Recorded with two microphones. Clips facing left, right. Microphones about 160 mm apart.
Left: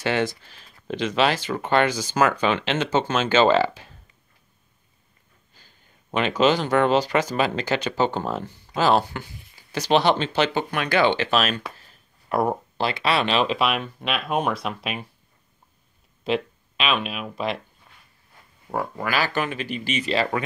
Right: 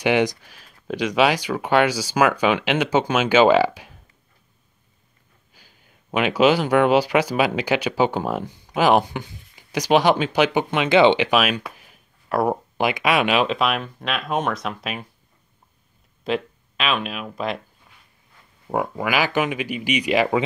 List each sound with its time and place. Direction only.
0.0 s speech: 15° right (ahead or behind)
5.5 s speech: 10° right (ahead or behind)
12.3 s speech: centre (ahead or behind)
12.7 s speech: 15° right (ahead or behind)
13.5 s speech: centre (ahead or behind)
16.3 s speech: centre (ahead or behind)
18.7 s speech: 15° right (ahead or behind)